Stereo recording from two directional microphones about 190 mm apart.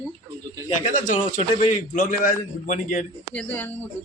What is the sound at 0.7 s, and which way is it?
A man's voice, 40° left (ahead or behind).